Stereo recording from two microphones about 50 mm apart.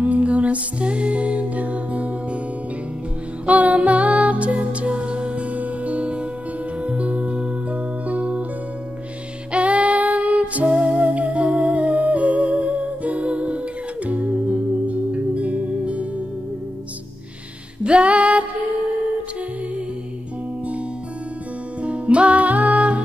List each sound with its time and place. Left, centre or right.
0.0 s music: right
3.4 s music: right
9.5 s music: right
17.8 s female singing: right
21.8 s music: right